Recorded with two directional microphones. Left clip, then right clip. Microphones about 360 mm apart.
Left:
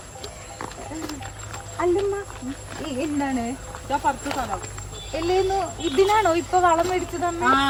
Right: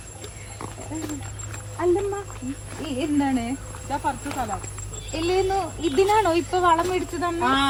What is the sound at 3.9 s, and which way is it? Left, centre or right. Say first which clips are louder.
Speech: left 3 dB; centre.